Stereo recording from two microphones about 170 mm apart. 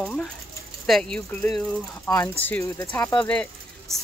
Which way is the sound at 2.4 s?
15° left (ahead or behind).